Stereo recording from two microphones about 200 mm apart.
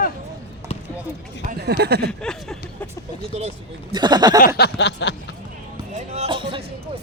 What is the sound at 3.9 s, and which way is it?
Speech, 20° right (ahead or behind).